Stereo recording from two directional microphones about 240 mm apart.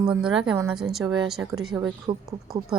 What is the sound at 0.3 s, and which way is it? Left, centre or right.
Speech, centre.